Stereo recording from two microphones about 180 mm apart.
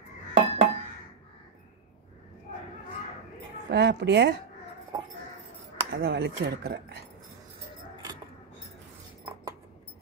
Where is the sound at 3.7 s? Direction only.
70° right (ahead or behind).